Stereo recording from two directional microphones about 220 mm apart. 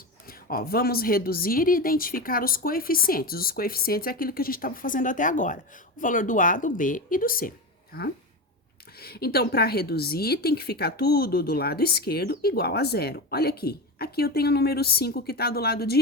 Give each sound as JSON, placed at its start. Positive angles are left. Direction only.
{"t": 0.3, "sound": "a woman's voice", "side_deg": 40}